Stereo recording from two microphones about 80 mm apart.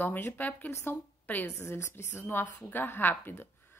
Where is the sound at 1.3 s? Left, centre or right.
Left.